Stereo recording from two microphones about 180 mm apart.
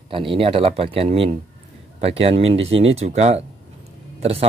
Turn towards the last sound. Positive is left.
turn(degrees=-35)  # may be behind; listen again after turning